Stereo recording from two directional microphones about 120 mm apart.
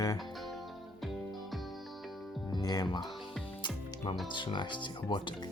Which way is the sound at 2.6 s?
30° left (ahead or behind).